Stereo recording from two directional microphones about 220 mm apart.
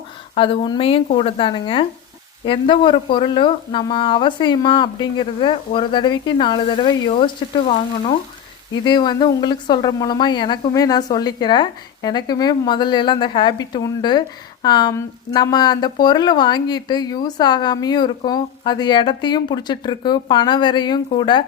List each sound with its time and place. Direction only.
0.3 s speech: 25° left (ahead or behind)